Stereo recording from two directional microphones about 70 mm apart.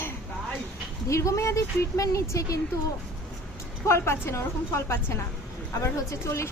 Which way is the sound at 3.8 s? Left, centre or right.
Left.